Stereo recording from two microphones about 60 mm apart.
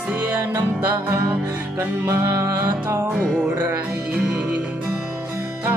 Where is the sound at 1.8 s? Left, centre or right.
Right.